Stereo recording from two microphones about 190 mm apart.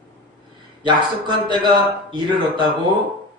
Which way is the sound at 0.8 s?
25° right (ahead or behind).